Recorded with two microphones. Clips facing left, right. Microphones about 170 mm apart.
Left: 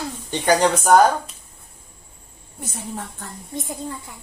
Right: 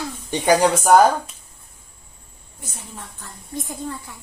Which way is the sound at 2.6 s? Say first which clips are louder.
Left 7 dB; 60° left (ahead or behind).